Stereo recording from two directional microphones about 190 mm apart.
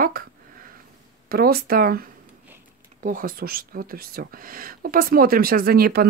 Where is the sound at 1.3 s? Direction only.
50° right (ahead or behind).